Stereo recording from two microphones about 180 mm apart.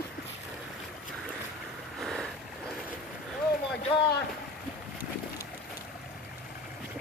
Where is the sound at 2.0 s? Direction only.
5° left (ahead or behind).